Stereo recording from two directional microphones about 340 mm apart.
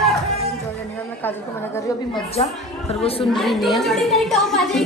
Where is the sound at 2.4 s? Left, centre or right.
Centre.